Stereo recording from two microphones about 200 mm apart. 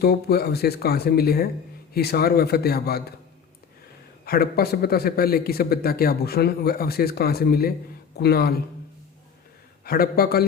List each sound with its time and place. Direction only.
0.0 s a man's voice: 50° left (ahead or behind)
4.3 s a man's voice: 50° left (ahead or behind)
9.8 s a man's voice: 50° left (ahead or behind)